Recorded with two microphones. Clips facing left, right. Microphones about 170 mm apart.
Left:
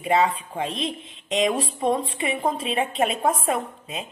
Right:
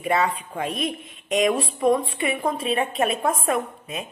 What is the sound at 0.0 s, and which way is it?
A woman's voice, 25° left (ahead or behind).